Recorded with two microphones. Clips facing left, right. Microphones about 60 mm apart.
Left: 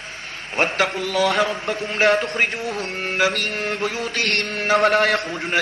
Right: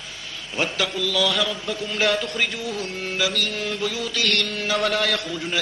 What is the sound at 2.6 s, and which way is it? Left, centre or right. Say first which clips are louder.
Chant: left 2 dB; left.